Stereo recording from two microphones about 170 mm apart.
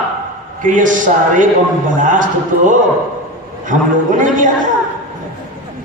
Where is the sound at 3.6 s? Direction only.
50° right (ahead or behind).